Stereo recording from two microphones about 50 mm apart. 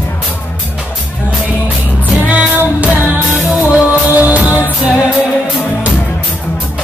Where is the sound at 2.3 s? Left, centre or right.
Right.